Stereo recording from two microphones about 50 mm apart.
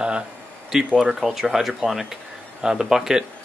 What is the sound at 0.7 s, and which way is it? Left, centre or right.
Speech, centre.